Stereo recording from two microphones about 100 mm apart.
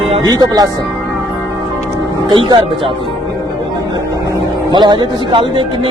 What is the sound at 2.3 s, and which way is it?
Speech, 55° right (ahead or behind).